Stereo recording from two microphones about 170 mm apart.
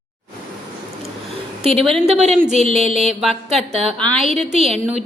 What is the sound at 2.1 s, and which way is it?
A woman's voice, 40° right (ahead or behind).